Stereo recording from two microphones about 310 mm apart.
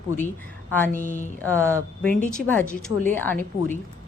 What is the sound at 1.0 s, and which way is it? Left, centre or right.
Speech, left.